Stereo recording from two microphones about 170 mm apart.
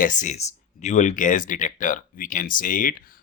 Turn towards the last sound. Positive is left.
turn(degrees=55)  # may be behind; listen again after turning